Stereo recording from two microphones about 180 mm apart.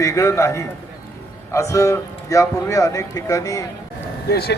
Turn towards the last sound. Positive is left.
turn(degrees=60)  # may be behind; listen again after turning